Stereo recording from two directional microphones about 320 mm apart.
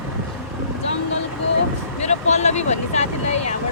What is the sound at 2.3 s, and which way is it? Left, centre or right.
Speech, left.